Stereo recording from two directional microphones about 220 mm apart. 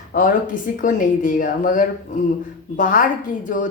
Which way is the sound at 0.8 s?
35° left (ahead or behind).